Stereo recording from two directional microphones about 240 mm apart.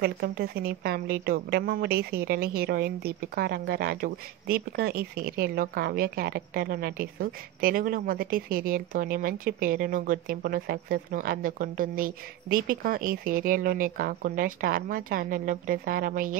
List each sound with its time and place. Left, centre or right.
0.0 s a woman's voice: right